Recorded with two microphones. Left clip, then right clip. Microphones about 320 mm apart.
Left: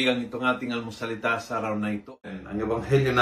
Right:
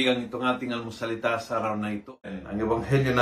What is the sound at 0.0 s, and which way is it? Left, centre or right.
Speech, centre.